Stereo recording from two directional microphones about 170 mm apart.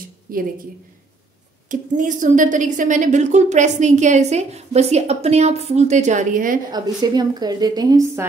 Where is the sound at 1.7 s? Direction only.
50° right (ahead or behind).